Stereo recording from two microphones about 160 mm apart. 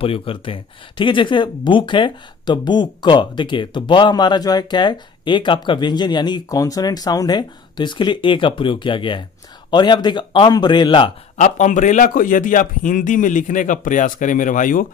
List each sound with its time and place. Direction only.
0.0 s speech: 35° left (ahead or behind)
11.3 s a man's voice: 50° left (ahead or behind)